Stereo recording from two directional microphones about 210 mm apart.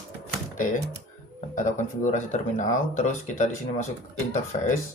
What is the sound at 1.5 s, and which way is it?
Speech, 35° left (ahead or behind).